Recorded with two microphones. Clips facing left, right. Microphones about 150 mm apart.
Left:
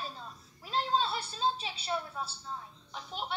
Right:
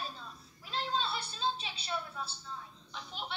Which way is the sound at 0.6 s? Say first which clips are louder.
Left 5 dB; 45° left (ahead or behind).